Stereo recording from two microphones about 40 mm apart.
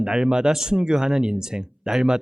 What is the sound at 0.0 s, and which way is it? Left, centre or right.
A man's voice, centre.